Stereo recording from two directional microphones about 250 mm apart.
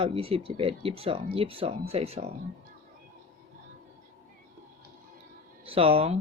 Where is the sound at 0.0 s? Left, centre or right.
Right.